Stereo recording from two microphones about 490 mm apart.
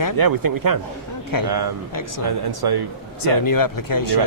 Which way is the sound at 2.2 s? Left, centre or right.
Right.